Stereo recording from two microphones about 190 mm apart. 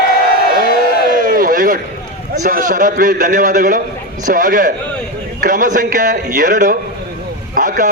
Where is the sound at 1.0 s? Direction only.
45° right (ahead or behind).